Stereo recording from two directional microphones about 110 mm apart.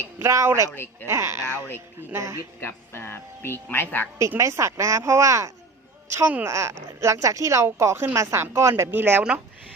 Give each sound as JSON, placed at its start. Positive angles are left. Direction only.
{"t": 0.2, "sound": "a woman's voice", "side_deg": -25}
{"t": 1.4, "sound": "speech", "side_deg": 25}
{"t": 2.0, "sound": "a woman's voice", "side_deg": -25}
{"t": 2.6, "sound": "speech", "side_deg": 25}
{"t": 4.4, "sound": "a woman's voice", "side_deg": -25}
{"t": 6.1, "sound": "a woman's voice", "side_deg": -15}